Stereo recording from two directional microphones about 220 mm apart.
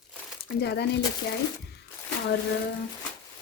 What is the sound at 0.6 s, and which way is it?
Speech, 50° left (ahead or behind).